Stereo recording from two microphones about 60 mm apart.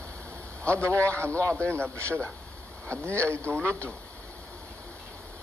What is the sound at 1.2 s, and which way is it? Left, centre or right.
Speech, right.